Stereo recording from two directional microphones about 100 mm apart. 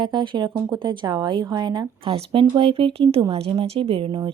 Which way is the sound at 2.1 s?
60° right (ahead or behind).